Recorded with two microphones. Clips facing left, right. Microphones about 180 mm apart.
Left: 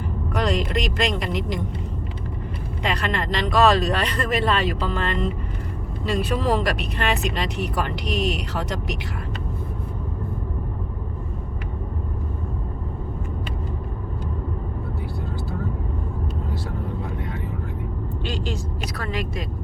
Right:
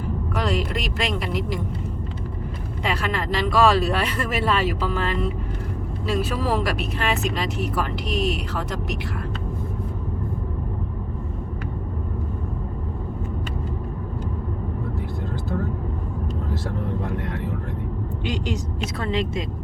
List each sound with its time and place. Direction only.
0.3 s speech: 5° right (ahead or behind)
2.8 s speech: 5° right (ahead or behind)
17.2 s vehicle: 75° right (ahead or behind)
18.3 s speech: 20° right (ahead or behind)